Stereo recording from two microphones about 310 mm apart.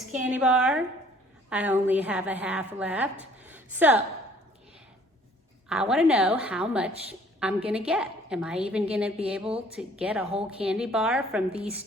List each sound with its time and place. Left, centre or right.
0.1 s a woman's voice: centre
3.4 s a sound: centre
5.6 s a woman's voice: centre